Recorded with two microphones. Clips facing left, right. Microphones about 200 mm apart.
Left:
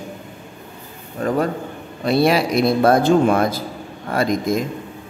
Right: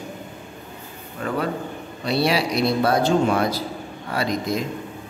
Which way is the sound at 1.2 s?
40° left (ahead or behind).